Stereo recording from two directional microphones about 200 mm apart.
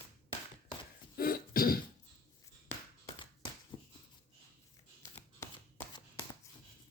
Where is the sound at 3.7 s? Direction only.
25° left (ahead or behind).